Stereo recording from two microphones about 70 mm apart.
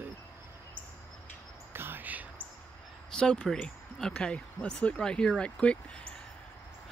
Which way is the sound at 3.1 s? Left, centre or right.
Centre.